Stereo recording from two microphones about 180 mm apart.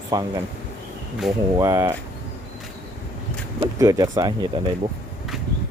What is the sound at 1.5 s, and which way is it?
Speech, 20° right (ahead or behind).